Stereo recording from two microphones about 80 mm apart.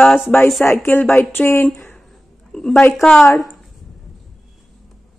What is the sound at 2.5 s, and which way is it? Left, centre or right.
Speech, centre.